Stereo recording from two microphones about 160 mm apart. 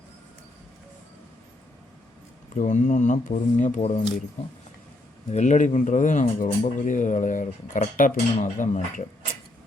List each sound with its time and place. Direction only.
2.6 s speech: 50° left (ahead or behind)
5.3 s speech: 50° left (ahead or behind)